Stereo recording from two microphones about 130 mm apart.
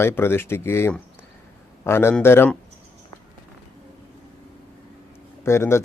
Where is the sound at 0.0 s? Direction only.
20° left (ahead or behind).